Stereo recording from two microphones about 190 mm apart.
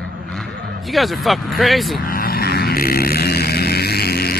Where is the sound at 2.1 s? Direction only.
50° left (ahead or behind).